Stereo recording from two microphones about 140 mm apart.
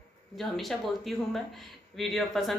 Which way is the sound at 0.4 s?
Centre (ahead or behind).